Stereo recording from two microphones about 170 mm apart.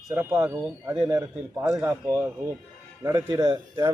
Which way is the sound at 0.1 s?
15° right (ahead or behind).